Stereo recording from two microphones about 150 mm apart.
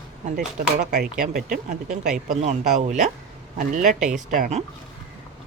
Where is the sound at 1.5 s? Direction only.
55° right (ahead or behind).